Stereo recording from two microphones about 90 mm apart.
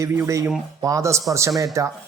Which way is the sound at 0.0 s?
35° right (ahead or behind).